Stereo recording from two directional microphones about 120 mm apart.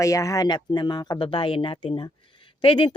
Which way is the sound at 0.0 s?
25° left (ahead or behind).